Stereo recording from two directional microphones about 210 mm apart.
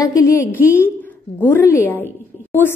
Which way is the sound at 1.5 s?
10° left (ahead or behind).